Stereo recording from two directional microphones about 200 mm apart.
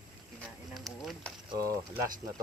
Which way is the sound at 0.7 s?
Centre (ahead or behind).